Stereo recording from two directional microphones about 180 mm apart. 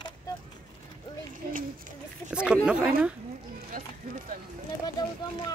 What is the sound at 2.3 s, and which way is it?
Chatter, 5° right (ahead or behind).